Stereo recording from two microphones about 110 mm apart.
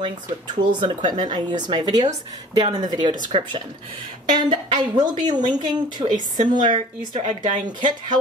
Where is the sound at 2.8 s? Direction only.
40° right (ahead or behind).